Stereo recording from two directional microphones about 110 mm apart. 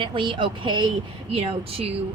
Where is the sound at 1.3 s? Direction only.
60° right (ahead or behind).